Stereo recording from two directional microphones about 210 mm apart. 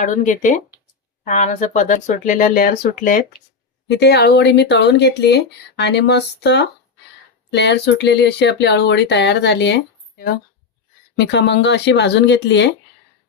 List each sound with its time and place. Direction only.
0.0 s speech: 35° left (ahead or behind)
3.8 s speech: 55° left (ahead or behind)